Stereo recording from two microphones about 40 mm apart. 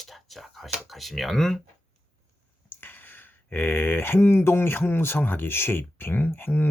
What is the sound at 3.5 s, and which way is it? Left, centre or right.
Speech, left.